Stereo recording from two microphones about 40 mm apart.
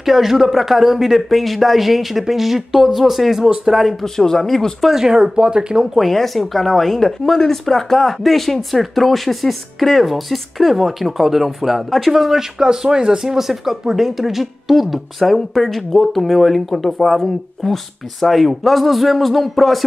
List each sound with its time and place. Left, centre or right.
0.0 s speech: centre
4.0 s speech: centre
5.0 s speech: centre
5.9 s speech: centre